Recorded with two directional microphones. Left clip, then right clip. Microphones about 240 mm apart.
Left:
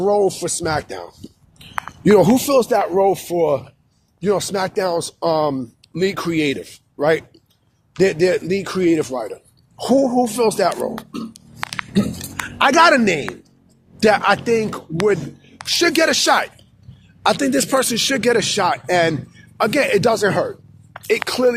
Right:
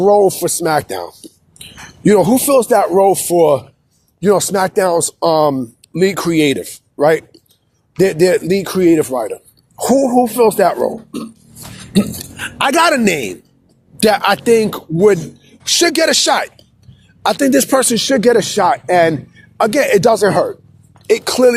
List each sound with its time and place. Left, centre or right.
0.0 s speech: right
11.9 s speech: right
14.0 s speech: right
17.9 s speech: right
19.5 s speech: right